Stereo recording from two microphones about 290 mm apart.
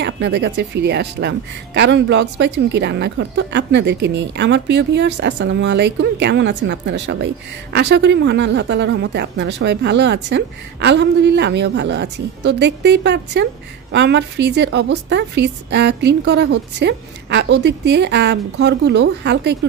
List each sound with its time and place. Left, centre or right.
0.0 s speech: right